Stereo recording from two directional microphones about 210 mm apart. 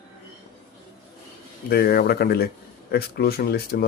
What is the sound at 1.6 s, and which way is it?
Speech, 50° left (ahead or behind).